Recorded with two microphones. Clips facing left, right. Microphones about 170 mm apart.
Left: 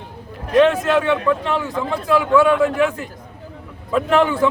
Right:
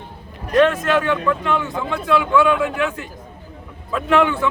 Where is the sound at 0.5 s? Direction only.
25° left (ahead or behind).